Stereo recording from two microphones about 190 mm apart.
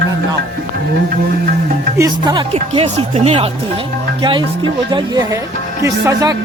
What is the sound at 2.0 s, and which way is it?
Speech, 20° right (ahead or behind).